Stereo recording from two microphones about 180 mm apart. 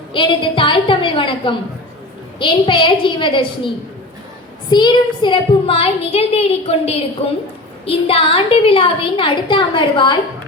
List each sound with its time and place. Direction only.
0.1 s a woman's voice: 30° left (ahead or behind)
4.7 s a woman's voice: 25° left (ahead or behind)